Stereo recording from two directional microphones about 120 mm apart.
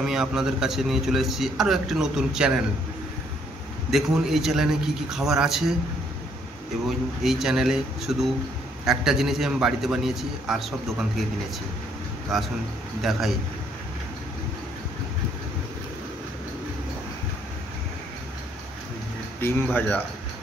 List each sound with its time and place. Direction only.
0.0 s a man's voice: 5° right (ahead or behind)
3.9 s a man's voice: 5° right (ahead or behind)
6.9 s a man's voice: 5° right (ahead or behind)
12.3 s a man's voice: centre (ahead or behind)
19.4 s speech: 15° left (ahead or behind)